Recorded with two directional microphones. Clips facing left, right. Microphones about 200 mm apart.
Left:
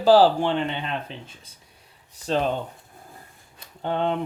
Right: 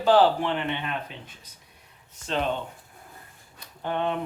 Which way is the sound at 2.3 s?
35° left (ahead or behind).